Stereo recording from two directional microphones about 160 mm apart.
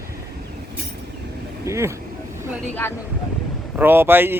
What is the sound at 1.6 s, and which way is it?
Speech, 20° right (ahead or behind).